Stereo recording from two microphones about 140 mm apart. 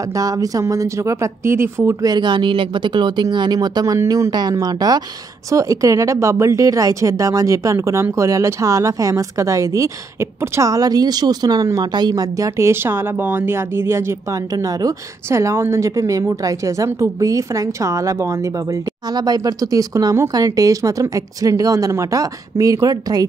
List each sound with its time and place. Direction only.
0.1 s speech: 25° right (ahead or behind)
2.1 s speech: 35° right (ahead or behind)